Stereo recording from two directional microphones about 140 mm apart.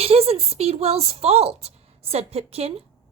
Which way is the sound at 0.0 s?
45° right (ahead or behind).